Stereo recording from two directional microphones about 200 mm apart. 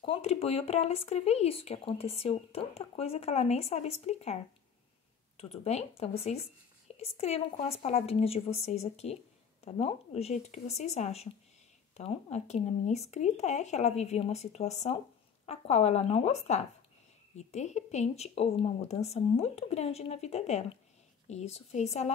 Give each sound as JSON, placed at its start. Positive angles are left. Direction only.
{"t": 0.0, "sound": "speech", "side_deg": 30}
{"t": 5.4, "sound": "speech", "side_deg": 30}